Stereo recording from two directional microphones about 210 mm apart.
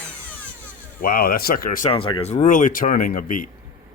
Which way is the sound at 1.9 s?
25° left (ahead or behind).